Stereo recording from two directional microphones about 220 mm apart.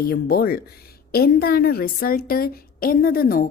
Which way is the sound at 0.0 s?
45° left (ahead or behind).